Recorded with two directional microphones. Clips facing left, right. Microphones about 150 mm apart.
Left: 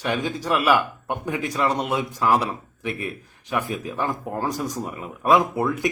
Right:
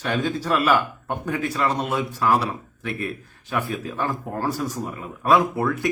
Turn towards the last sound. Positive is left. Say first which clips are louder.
# even
turn(degrees=15)  # may be behind; listen again after turning